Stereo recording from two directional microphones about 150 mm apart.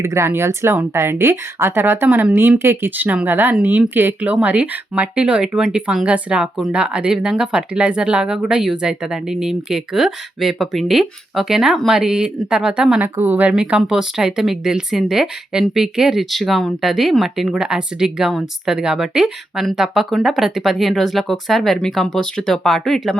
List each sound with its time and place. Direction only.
0.0 s speech: 15° right (ahead or behind); by 23.1 s centre (ahead or behind)